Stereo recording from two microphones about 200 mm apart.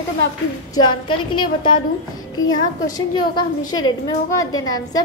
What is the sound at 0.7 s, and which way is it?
A woman's voice, 25° left (ahead or behind).